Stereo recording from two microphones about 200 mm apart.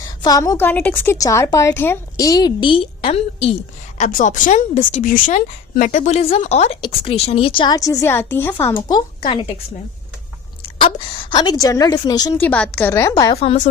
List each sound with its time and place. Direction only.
0.0 s a woman's voice: 20° left (ahead or behind)
10.6 s a woman's voice: 25° left (ahead or behind)
12.5 s a woman's voice: 5° left (ahead or behind)
13.3 s a woman's voice: 30° left (ahead or behind)